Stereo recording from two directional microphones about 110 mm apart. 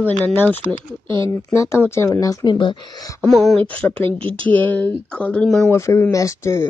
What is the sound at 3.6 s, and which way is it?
Speech, 55° right (ahead or behind).